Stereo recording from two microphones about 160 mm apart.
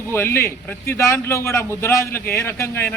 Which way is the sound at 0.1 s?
15° left (ahead or behind).